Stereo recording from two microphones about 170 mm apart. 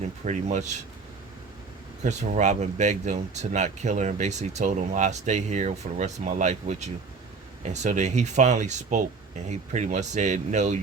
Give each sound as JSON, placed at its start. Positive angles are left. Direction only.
{"t": 0.3, "sound": "speech", "side_deg": -45}
{"t": 2.0, "sound": "speech", "side_deg": -45}